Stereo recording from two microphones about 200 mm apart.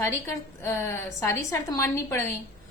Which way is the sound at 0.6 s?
15° left (ahead or behind).